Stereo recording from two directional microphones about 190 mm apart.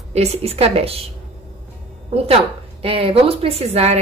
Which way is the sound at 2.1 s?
30° right (ahead or behind).